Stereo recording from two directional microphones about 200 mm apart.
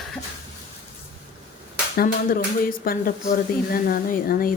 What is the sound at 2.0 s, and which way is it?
Speech, 45° left (ahead or behind).